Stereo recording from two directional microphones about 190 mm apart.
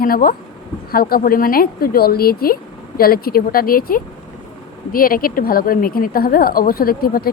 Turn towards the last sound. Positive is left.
turn(degrees=50)  # may be behind; listen again after turning